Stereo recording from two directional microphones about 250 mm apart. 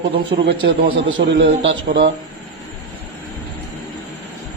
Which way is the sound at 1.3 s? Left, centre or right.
Right.